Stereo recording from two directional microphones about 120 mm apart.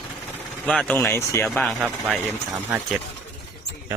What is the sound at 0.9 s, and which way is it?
Speech, 20° left (ahead or behind).